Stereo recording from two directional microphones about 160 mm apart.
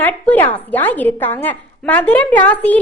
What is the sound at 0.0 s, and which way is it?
A woman's voice, 10° left (ahead or behind).